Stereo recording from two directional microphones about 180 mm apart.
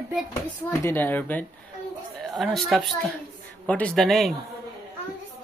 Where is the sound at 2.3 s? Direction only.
Centre (ahead or behind).